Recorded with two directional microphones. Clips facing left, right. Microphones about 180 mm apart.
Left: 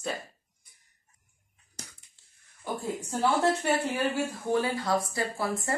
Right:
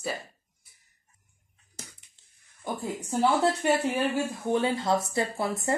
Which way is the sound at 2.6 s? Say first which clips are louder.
Even; 15° right (ahead or behind).